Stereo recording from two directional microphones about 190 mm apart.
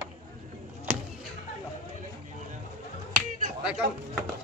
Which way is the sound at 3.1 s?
5° right (ahead or behind).